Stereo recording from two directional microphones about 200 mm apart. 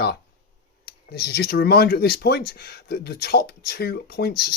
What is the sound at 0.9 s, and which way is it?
Speech, 50° left (ahead or behind).